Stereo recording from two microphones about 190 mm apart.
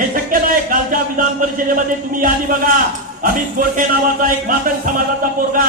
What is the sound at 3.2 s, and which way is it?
Speech, 45° right (ahead or behind).